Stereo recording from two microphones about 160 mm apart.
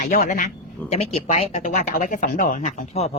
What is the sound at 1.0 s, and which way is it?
Speech, 45° left (ahead or behind).